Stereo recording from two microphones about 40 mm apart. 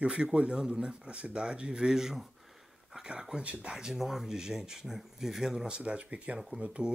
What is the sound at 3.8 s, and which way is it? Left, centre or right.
Speech, centre.